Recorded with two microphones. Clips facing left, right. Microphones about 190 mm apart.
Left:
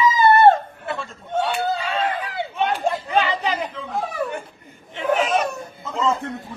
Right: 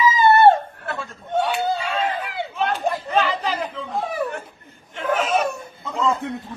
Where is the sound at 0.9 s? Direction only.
Centre (ahead or behind).